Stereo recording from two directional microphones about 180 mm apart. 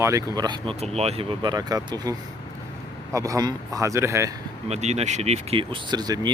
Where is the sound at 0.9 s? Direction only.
35° right (ahead or behind).